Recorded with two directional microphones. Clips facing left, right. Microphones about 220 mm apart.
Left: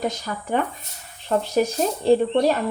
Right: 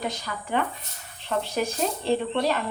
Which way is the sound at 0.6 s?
45° left (ahead or behind).